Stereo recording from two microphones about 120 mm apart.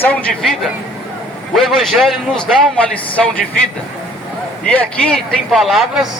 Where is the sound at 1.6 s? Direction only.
Centre (ahead or behind).